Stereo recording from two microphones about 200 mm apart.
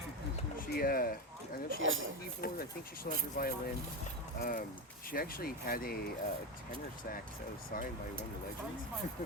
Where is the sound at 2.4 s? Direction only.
50° left (ahead or behind).